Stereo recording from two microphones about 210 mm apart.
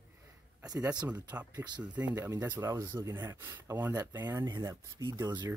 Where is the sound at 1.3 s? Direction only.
5° right (ahead or behind).